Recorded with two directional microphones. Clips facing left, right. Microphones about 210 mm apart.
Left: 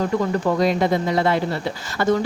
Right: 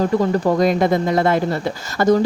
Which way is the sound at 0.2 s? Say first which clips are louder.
Right 3 dB; 40° right (ahead or behind).